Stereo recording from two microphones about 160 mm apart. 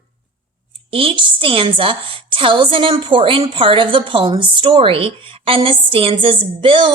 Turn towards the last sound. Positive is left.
turn(degrees=-30)  # may be behind; listen again after turning